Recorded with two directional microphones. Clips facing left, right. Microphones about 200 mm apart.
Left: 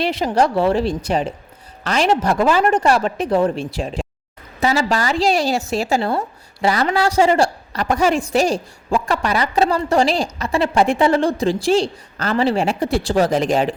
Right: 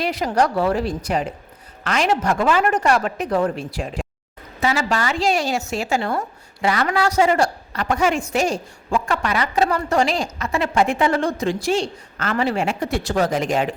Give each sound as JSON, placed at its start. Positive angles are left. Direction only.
{"t": 0.0, "sound": "a woman's voice", "side_deg": 25}
{"t": 4.6, "sound": "a woman's voice", "side_deg": 35}